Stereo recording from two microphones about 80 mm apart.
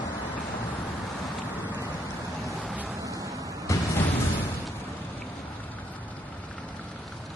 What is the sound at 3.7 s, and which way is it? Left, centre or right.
Music, left.